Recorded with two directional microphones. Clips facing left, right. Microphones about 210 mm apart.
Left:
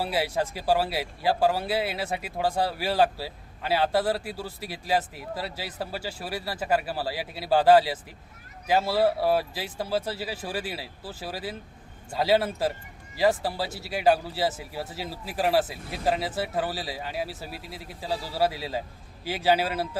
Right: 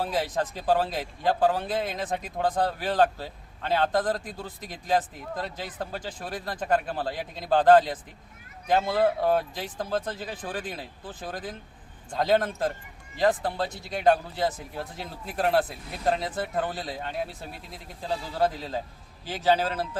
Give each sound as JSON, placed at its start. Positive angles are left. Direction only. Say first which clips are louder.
{"t": 0.0, "sound": "a man's voice", "louder": "left 1 dB", "side_deg": 10}